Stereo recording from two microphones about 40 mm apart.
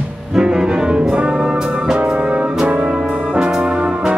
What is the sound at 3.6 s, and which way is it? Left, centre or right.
Brass instrument, right.